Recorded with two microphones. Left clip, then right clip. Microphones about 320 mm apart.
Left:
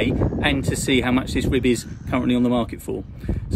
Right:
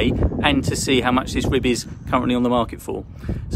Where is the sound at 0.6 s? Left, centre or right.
Right.